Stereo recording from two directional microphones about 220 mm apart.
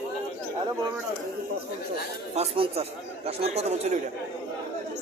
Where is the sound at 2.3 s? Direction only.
25° right (ahead or behind).